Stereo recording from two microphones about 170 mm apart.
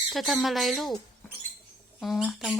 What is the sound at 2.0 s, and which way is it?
Speech, centre (ahead or behind).